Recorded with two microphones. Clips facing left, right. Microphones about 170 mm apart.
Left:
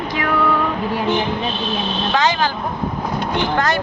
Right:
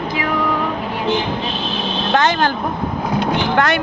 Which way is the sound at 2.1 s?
55° right (ahead or behind).